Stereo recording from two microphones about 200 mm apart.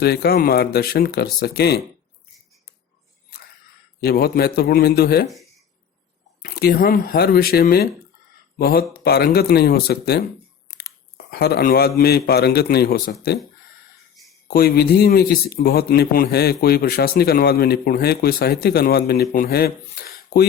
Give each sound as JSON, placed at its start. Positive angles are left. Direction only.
{"t": 0.0, "sound": "speech", "side_deg": 55}
{"t": 4.0, "sound": "speech", "side_deg": 50}
{"t": 5.3, "sound": "a sound", "side_deg": 0}
{"t": 6.4, "sound": "speech", "side_deg": 50}
{"t": 11.3, "sound": "speech", "side_deg": 55}
{"t": 14.4, "sound": "speech", "side_deg": 50}